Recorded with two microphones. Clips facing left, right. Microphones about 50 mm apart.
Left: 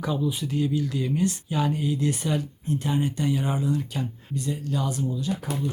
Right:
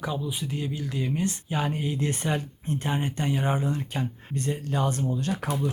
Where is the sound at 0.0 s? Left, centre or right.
Centre; by 5.4 s right.